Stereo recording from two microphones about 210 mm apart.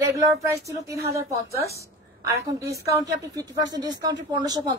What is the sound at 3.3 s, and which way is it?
A woman's voice, 15° right (ahead or behind).